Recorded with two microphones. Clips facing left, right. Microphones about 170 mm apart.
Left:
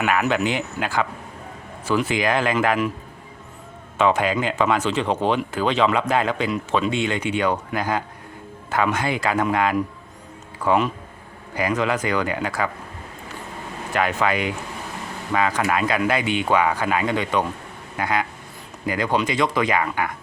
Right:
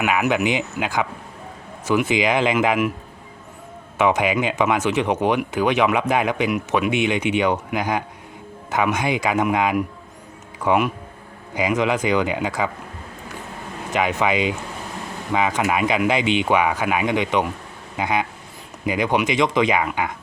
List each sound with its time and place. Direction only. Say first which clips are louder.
0.0 s speech: right 1 dB; 15° right (ahead or behind)
3.9 s speech: right 1 dB; 15° right (ahead or behind)
13.9 s speech: right 1 dB; 15° right (ahead or behind)